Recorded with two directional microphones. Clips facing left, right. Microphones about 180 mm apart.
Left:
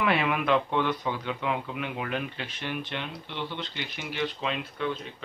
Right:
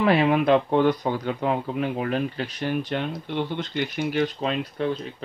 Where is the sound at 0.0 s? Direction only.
35° right (ahead or behind).